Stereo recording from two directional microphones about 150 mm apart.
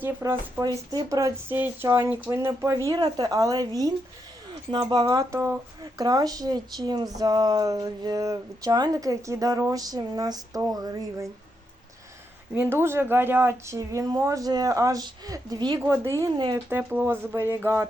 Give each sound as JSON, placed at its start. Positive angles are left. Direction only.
{"t": 0.0, "sound": "speech", "side_deg": -15}
{"t": 12.5, "sound": "speech", "side_deg": -15}